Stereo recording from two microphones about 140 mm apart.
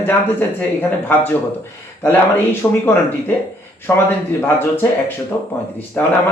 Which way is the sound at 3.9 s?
20° left (ahead or behind).